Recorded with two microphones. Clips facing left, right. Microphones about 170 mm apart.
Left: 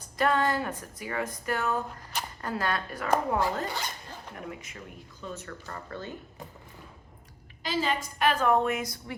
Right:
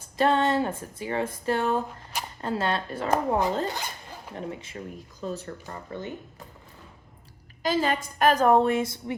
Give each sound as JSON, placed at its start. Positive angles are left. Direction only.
{"t": 0.2, "sound": "a woman's voice", "side_deg": -25}
{"t": 5.6, "sound": "speech", "side_deg": -15}
{"t": 7.6, "sound": "a woman's voice", "side_deg": -50}